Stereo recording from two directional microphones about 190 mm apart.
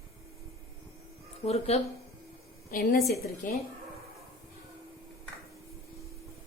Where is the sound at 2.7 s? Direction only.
50° left (ahead or behind).